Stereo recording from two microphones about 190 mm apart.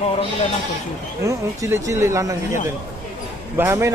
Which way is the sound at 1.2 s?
15° right (ahead or behind).